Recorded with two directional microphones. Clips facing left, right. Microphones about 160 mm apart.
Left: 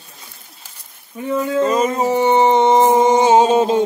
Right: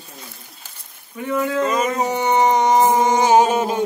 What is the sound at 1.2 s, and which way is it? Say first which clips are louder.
Speech: left 3 dB; 25° left (ahead or behind).